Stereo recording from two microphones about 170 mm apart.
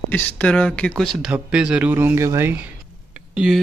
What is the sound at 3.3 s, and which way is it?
Speech, centre (ahead or behind).